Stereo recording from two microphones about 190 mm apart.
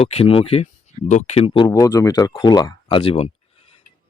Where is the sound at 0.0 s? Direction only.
35° left (ahead or behind).